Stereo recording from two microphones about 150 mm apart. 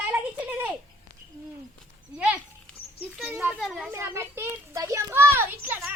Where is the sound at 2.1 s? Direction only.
10° right (ahead or behind).